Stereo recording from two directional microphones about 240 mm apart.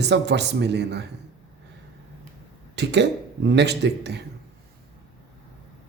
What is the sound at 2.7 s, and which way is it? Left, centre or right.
Speech, right.